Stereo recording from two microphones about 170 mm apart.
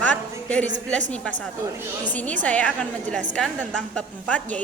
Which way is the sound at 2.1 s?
10° left (ahead or behind).